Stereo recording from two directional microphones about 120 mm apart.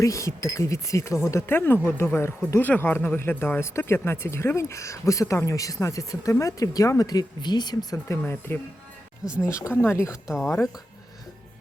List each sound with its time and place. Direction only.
0.0 s speech: 25° left (ahead or behind)
7.9 s speech: 20° left (ahead or behind)
10.2 s speech: 5° right (ahead or behind)